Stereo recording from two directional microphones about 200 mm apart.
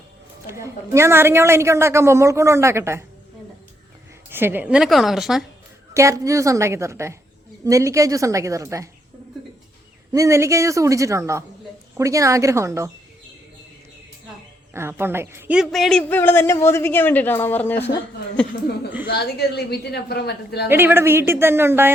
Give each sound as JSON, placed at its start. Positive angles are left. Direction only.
{"t": 0.4, "sound": "a woman's voice", "side_deg": -15}
{"t": 4.3, "sound": "a woman's voice", "side_deg": -10}
{"t": 5.9, "sound": "a woman's voice", "side_deg": -15}
{"t": 10.1, "sound": "a woman's voice", "side_deg": -15}
{"t": 14.7, "sound": "a woman's voice", "side_deg": -10}
{"t": 19.0, "sound": "a woman's voice", "side_deg": 55}
{"t": 20.7, "sound": "a woman's voice", "side_deg": -10}